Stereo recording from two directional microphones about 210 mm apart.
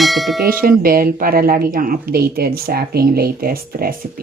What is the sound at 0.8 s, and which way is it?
Speech, 45° right (ahead or behind).